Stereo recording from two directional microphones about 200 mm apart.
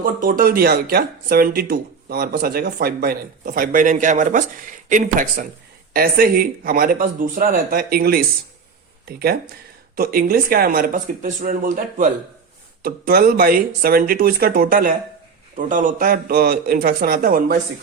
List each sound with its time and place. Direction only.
0.0 s speech: 45° right (ahead or behind)